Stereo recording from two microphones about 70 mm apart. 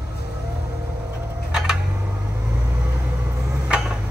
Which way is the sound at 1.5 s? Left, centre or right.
Centre.